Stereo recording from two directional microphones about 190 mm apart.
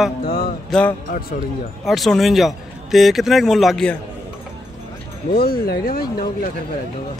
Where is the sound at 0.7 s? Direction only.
5° left (ahead or behind).